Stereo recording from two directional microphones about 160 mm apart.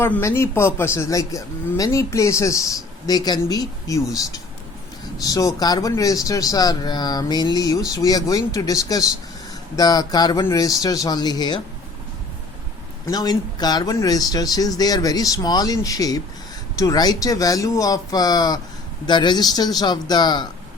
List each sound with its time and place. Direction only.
0.0 s a man's voice: 15° left (ahead or behind)
5.2 s a man's voice: 20° left (ahead or behind)
13.1 s a man's voice: 25° left (ahead or behind)